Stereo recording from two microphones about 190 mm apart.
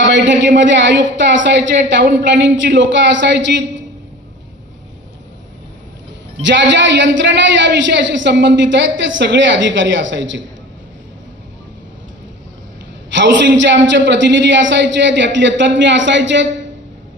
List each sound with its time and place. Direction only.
0.6 s a woman's voice: 70° right (ahead or behind)
6.4 s a woman's voice: 70° right (ahead or behind)
13.1 s a woman's voice: 70° right (ahead or behind)